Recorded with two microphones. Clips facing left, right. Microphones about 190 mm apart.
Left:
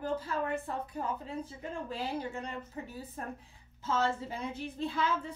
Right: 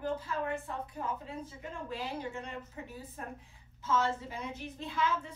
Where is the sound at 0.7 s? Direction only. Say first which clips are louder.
Left 3 dB; 40° left (ahead or behind).